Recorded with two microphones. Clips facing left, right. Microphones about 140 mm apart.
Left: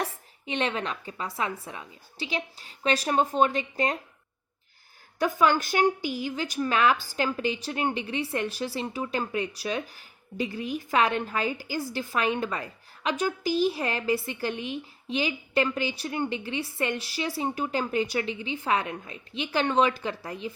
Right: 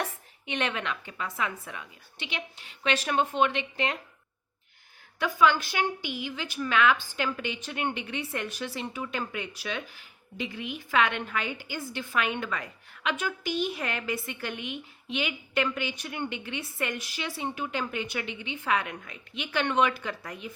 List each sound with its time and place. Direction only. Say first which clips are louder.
0.0 s a woman's voice: left 2 dB; 30° left (ahead or behind)
5.2 s a woman's voice: left 1 dB; 45° left (ahead or behind)